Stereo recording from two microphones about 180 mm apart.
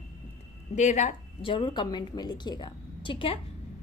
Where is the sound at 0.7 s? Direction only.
40° left (ahead or behind).